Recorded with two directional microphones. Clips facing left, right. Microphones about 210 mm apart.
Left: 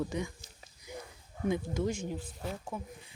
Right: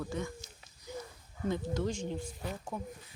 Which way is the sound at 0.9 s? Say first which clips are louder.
Right 2 dB; 15° left (ahead or behind).